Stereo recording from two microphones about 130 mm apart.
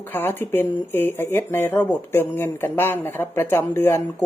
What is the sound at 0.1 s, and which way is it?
Speech, 15° left (ahead or behind).